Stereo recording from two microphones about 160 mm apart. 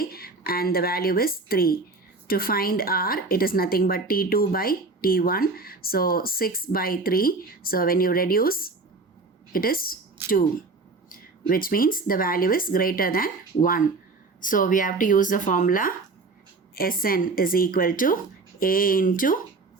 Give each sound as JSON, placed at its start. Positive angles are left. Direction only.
{"t": 0.0, "sound": "a woman's voice", "side_deg": 70}
{"t": 11.1, "sound": "a woman's voice", "side_deg": 65}